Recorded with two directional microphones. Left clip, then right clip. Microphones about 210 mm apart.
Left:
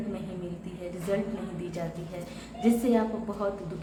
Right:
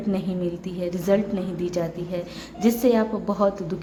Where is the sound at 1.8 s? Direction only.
55° right (ahead or behind).